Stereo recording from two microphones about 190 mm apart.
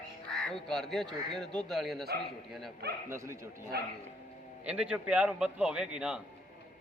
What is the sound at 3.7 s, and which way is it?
Speech, 55° right (ahead or behind).